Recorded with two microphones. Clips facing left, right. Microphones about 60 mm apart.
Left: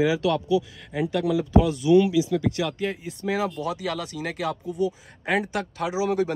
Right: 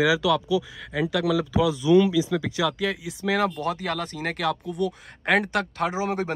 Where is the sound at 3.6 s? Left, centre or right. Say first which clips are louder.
Right 1 dB; right.